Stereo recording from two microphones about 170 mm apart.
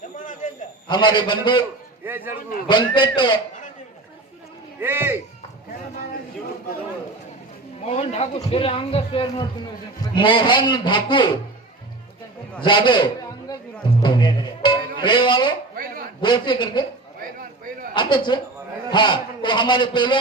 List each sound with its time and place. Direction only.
0.4 s a sound: 45° left (ahead or behind)
0.9 s a man's voice: 25° left (ahead or behind)
2.0 s speech: 10° right (ahead or behind)
2.6 s a man's voice: 25° left (ahead or behind)
4.8 s speech: 15° right (ahead or behind)
7.9 s a man's voice: 40° left (ahead or behind)
12.6 s a man's voice: 25° left (ahead or behind)
15.7 s a sound: 55° right (ahead or behind)
16.2 s a man's voice: 25° left (ahead or behind)
17.9 s a man's voice: 25° left (ahead or behind)